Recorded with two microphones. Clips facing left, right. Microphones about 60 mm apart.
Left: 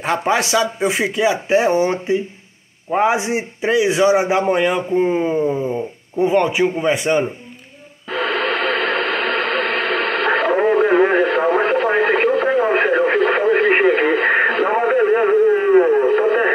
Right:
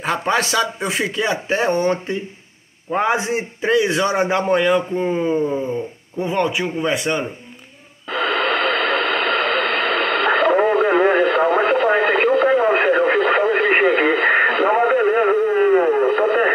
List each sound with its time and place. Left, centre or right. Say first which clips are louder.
0.0 s a man's voice: left 1 dB; centre; by 7.2 s left
8.1 s radio: even; centre